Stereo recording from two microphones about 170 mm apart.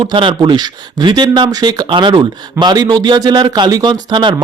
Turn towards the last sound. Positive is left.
turn(degrees=-30)  # may be behind; listen again after turning